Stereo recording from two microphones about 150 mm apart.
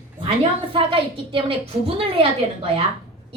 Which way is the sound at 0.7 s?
35° right (ahead or behind).